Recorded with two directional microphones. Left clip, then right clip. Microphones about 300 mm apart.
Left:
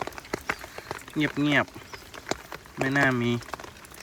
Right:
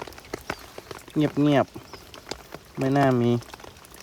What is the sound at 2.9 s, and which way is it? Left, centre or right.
Speech, centre.